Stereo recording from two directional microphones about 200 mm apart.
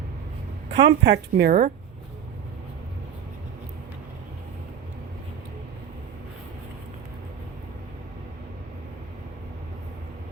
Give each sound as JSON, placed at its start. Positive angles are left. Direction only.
{"t": 0.7, "sound": "speech", "side_deg": -60}